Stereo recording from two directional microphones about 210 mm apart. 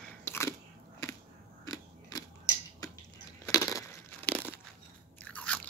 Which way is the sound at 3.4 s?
15° left (ahead or behind).